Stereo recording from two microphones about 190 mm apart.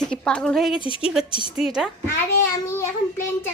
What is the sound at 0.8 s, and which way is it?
Speech, 25° left (ahead or behind).